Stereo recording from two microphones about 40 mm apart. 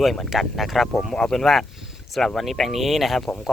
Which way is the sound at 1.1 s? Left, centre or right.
Centre.